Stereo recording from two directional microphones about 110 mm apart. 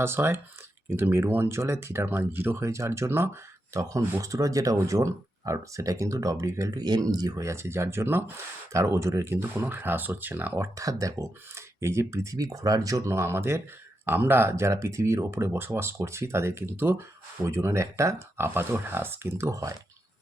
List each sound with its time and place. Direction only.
0.0 s speech: 20° right (ahead or behind)
10.8 s speech: 30° right (ahead or behind)